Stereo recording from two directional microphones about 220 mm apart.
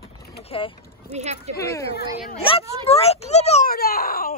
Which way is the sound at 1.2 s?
30° right (ahead or behind).